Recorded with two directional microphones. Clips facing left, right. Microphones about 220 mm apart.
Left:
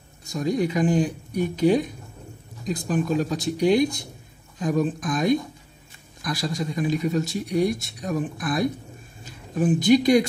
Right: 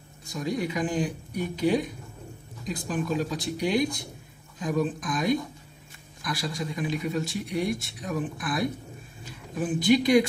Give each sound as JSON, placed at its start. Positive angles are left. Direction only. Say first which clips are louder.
{"t": 0.3, "sound": "speech", "louder": "left 5 dB", "side_deg": 40}
{"t": 9.8, "sound": "speech", "louder": "left 2 dB", "side_deg": 45}